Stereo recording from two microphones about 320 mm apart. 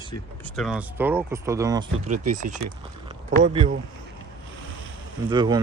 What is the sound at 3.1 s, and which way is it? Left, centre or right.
Speech, centre.